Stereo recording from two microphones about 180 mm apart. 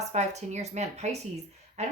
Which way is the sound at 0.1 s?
40° right (ahead or behind).